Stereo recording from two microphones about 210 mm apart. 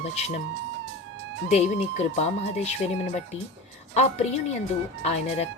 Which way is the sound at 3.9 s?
30° left (ahead or behind).